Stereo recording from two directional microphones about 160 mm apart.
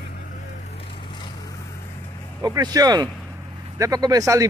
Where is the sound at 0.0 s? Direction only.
65° left (ahead or behind); by 1.3 s 30° left (ahead or behind).